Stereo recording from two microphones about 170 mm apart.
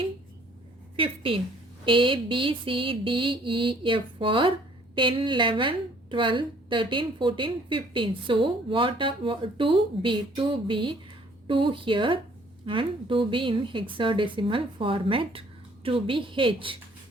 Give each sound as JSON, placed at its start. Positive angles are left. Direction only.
{"t": 0.9, "sound": "a woman's voice", "side_deg": -30}